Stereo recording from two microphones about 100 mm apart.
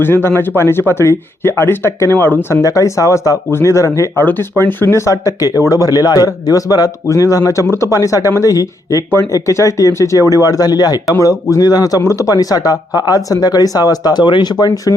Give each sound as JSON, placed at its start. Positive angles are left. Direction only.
{"t": 0.0, "sound": "speech", "side_deg": 25}